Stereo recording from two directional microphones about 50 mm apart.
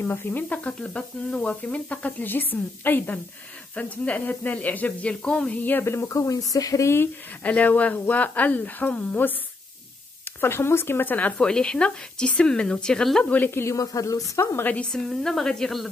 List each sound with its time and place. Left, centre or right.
0.0 s speech: left
0.7 s speech: centre
2.2 s a woman's voice: left
3.7 s speech: left
5.2 s speech: centre
5.6 s speech: left
5.9 s speech: left
6.8 s speech: left
7.4 s speech: left
10.2 s speech: left
11.3 s speech: centre
13.2 s speech: left
13.7 s speech: left
14.9 s speech: centre